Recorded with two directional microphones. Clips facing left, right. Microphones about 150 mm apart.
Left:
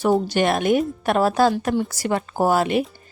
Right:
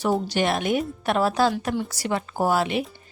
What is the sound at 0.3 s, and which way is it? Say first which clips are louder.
A woman's voice: left 4 dB; 50° left (ahead or behind).